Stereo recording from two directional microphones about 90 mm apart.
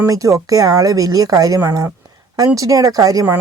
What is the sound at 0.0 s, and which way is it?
Speech, 35° right (ahead or behind).